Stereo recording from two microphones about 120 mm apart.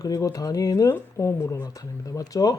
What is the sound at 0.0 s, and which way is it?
Speech, 30° left (ahead or behind).